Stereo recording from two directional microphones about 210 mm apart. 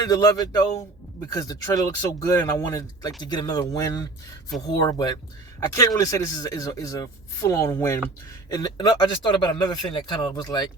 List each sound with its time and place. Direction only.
0.1 s speech: 15° left (ahead or behind)